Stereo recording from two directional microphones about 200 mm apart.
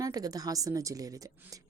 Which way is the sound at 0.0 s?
20° right (ahead or behind).